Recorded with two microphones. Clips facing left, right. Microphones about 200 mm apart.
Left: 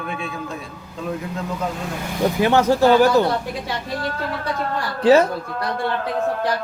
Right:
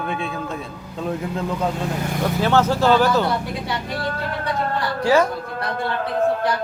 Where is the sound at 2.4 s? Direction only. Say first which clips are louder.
Left 2 dB; 15° left (ahead or behind).